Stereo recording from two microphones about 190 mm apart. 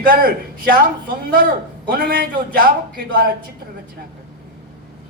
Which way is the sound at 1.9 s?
50° right (ahead or behind).